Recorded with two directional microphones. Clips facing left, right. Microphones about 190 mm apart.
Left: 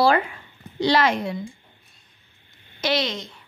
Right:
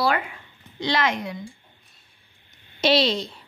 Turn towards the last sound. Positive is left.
turn(degrees=-30)  # may be behind; listen again after turning